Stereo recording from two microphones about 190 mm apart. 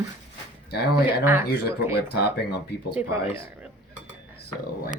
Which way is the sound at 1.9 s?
60° left (ahead or behind).